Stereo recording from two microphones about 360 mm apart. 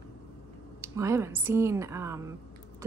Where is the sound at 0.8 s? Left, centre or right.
Centre.